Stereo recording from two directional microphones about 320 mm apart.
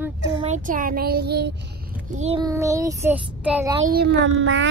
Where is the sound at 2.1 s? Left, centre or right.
Centre.